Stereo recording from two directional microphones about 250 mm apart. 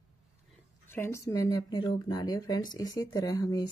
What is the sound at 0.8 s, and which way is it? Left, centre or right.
Speech, centre.